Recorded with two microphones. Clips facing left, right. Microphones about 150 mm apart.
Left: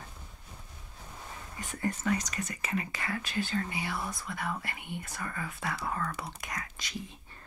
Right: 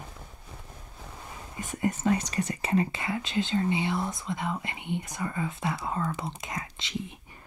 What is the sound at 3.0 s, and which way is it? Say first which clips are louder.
Speech: right 4 dB; 20° right (ahead or behind).